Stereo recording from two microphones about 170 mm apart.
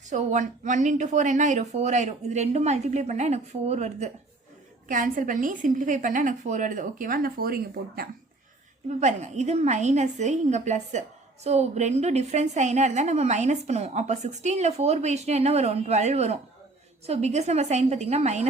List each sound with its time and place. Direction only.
0.1 s speech: 45° right (ahead or behind); by 8.0 s 60° right (ahead or behind)
9.0 s a woman's voice: 45° right (ahead or behind)